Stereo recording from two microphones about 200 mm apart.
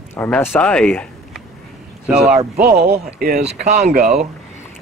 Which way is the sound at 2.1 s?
5° right (ahead or behind).